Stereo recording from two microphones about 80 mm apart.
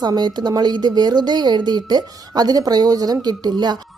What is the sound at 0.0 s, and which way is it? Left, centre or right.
A woman's voice, right.